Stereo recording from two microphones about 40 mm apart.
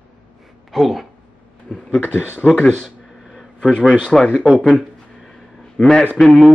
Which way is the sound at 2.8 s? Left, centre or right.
Centre.